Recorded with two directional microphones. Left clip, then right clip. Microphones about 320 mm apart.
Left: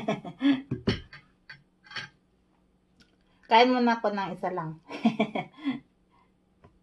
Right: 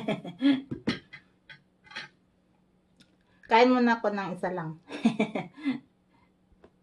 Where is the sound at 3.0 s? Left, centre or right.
Centre.